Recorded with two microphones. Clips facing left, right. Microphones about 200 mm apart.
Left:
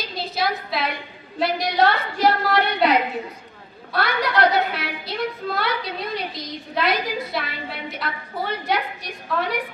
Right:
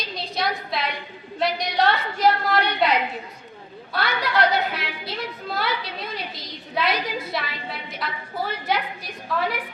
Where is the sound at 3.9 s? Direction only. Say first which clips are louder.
Left 2 dB; centre (ahead or behind).